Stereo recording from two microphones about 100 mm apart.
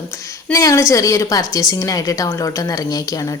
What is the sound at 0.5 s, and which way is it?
A woman's voice, 30° left (ahead or behind).